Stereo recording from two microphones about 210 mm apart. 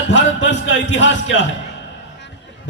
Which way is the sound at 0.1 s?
60° left (ahead or behind).